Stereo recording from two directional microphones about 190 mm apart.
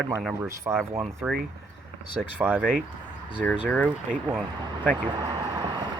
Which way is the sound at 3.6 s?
5° left (ahead or behind).